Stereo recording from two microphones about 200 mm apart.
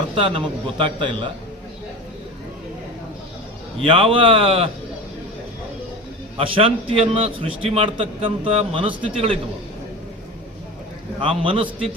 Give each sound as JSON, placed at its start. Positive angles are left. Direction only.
{"t": 0.2, "sound": "a man's voice", "side_deg": -25}
{"t": 3.8, "sound": "a man's voice", "side_deg": -25}
{"t": 6.3, "sound": "a man's voice", "side_deg": -25}
{"t": 11.2, "sound": "a man's voice", "side_deg": -25}